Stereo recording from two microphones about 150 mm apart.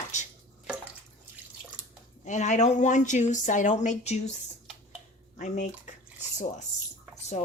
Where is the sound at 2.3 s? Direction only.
55° left (ahead or behind).